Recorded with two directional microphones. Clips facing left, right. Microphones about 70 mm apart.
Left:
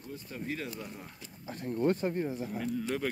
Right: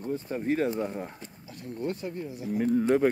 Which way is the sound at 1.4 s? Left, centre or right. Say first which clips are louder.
Left 4 dB; left.